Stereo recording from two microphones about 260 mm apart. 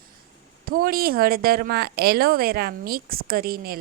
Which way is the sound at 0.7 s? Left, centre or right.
Right.